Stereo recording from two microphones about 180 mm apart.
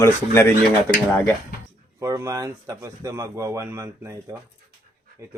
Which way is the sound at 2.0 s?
15° right (ahead or behind).